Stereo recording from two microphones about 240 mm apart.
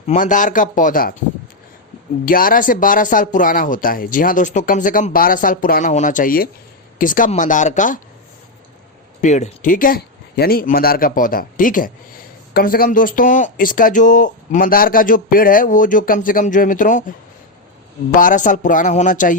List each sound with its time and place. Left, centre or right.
0.1 s speech: left
2.2 s speech: left
9.2 s speech: left
18.2 s speech: left